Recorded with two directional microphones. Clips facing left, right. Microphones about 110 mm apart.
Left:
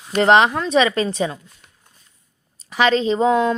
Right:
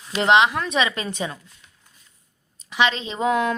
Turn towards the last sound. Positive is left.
turn(degrees=25)  # may be behind; listen again after turning